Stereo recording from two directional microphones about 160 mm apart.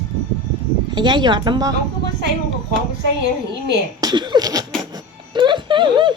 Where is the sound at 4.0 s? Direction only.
25° right (ahead or behind).